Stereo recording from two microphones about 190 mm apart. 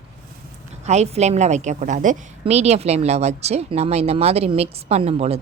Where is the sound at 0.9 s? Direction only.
35° right (ahead or behind).